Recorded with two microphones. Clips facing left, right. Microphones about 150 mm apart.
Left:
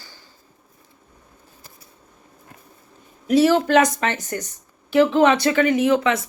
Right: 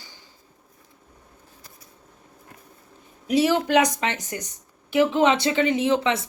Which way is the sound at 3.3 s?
15° right (ahead or behind).